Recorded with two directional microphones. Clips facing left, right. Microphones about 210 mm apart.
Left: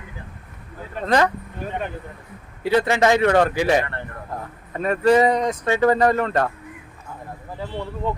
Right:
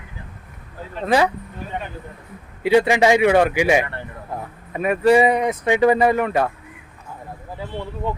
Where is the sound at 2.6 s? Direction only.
15° right (ahead or behind).